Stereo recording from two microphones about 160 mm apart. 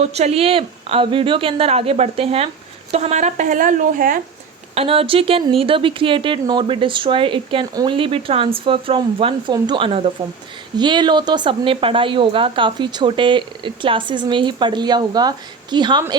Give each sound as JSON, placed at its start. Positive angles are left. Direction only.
{"t": 0.0, "sound": "speech", "side_deg": -40}
{"t": 4.7, "sound": "speech", "side_deg": -35}